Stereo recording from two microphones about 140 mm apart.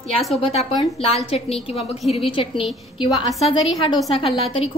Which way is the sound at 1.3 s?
45° left (ahead or behind).